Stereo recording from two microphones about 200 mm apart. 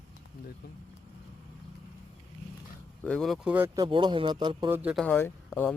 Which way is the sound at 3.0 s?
Centre (ahead or behind).